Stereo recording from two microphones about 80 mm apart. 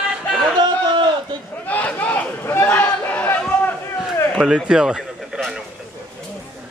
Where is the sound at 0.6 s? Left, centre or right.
Right.